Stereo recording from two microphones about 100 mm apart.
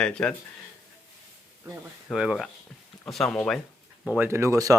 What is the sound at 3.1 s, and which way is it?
Speech, 5° left (ahead or behind).